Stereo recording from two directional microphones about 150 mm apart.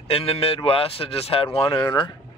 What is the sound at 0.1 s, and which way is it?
Speech, 40° left (ahead or behind).